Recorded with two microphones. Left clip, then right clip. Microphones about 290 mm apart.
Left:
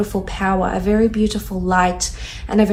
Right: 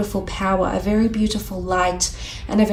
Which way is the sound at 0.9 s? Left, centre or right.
Right.